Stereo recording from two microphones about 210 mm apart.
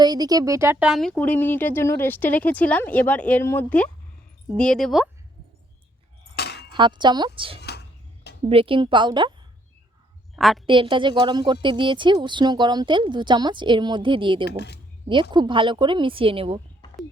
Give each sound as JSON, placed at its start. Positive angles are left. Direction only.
{"t": 0.0, "sound": "a woman's voice", "side_deg": -20}
{"t": 6.3, "sound": "a sound", "side_deg": 50}
{"t": 6.7, "sound": "a woman's voice", "side_deg": -20}
{"t": 7.6, "sound": "a sound", "side_deg": 50}
{"t": 8.4, "sound": "a woman's voice", "side_deg": -25}
{"t": 10.3, "sound": "a woman's voice", "side_deg": 0}
{"t": 10.7, "sound": "a woman's voice", "side_deg": -25}
{"t": 14.5, "sound": "speech", "side_deg": 50}
{"t": 15.0, "sound": "a woman's voice", "side_deg": -25}